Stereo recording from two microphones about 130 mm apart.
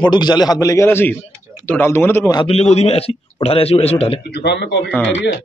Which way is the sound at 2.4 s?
55° left (ahead or behind).